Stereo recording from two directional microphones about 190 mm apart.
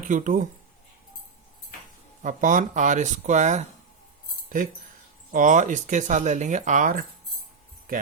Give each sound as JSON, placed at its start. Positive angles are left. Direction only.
{"t": 0.1, "sound": "speech", "side_deg": -40}
{"t": 2.2, "sound": "speech", "side_deg": -40}